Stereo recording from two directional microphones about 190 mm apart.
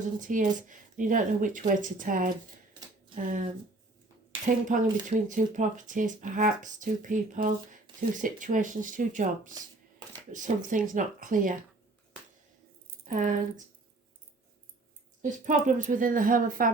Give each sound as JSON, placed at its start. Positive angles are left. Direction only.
{"t": 0.2, "sound": "speech", "side_deg": -45}
{"t": 4.4, "sound": "speech", "side_deg": -45}
{"t": 13.1, "sound": "speech", "side_deg": -45}
{"t": 15.2, "sound": "speech", "side_deg": -40}